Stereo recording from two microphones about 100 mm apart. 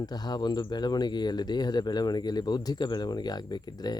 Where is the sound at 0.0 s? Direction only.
40° left (ahead or behind).